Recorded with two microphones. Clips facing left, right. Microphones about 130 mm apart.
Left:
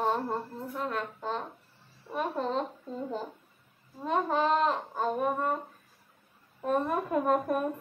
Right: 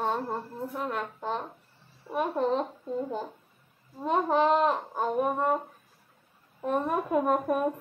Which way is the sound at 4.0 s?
15° right (ahead or behind).